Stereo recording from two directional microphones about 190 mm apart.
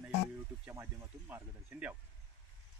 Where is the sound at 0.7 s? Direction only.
15° right (ahead or behind).